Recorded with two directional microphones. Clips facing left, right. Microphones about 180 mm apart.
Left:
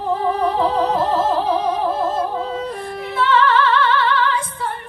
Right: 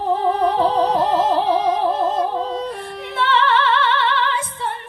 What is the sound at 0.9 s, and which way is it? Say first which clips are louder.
Music: right 1 dB; 5° left (ahead or behind).